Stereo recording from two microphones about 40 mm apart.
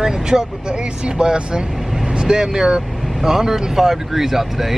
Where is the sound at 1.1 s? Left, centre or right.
Right.